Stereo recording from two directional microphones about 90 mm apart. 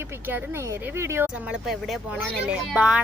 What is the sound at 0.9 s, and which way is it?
Speech, 30° right (ahead or behind).